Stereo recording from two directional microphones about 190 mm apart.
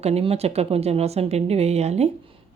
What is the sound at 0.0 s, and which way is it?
Speech, 30° right (ahead or behind).